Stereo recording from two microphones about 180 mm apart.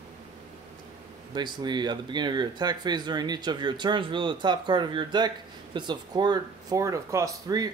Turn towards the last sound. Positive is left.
turn(degrees=-20)  # may be behind; listen again after turning